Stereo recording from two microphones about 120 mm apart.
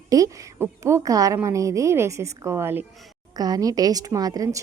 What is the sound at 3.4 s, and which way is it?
A woman's voice, 30° right (ahead or behind).